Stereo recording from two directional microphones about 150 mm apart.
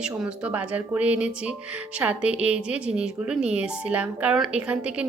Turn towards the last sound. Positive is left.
turn(degrees=-10)  # may be behind; listen again after turning